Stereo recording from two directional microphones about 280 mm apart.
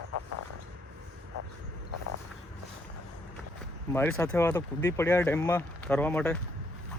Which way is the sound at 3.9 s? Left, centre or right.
Centre.